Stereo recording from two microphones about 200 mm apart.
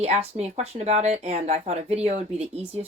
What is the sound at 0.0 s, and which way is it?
Speech, 30° right (ahead or behind).